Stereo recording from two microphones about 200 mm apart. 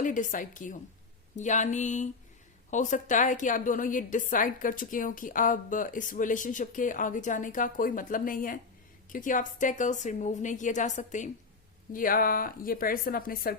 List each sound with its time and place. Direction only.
0.0 s a woman's voice: 40° left (ahead or behind)